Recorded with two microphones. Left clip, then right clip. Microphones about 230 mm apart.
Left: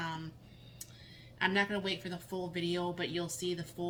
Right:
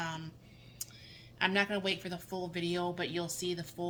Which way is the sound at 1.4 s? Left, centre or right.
Right.